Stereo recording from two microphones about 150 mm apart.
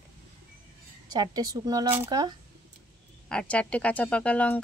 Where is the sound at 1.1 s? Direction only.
25° right (ahead or behind).